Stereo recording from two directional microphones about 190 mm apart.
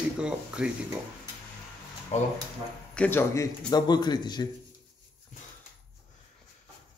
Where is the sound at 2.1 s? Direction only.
35° left (ahead or behind).